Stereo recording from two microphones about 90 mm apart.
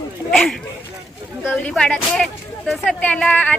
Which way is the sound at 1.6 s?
10° left (ahead or behind).